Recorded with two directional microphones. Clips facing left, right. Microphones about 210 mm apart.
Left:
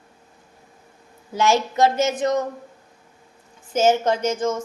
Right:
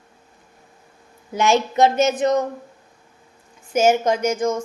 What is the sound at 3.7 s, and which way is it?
Speech, 10° right (ahead or behind).